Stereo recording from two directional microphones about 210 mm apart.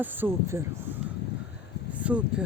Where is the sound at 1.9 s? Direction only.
5° right (ahead or behind).